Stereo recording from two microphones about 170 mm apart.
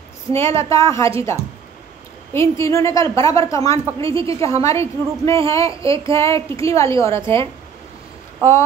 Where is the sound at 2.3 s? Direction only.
15° left (ahead or behind).